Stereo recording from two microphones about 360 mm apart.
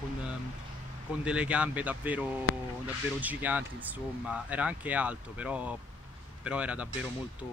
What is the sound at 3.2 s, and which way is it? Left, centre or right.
Speech, centre.